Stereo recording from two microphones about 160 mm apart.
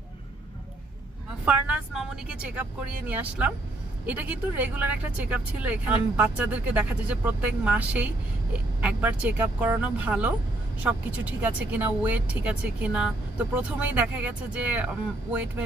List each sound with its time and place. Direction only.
1.4 s speech: 10° right (ahead or behind)